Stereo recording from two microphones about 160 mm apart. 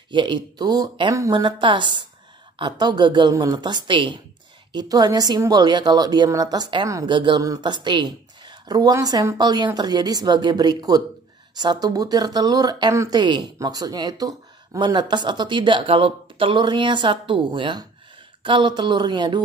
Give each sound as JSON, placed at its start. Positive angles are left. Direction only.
{"t": 0.1, "sound": "speech", "side_deg": -30}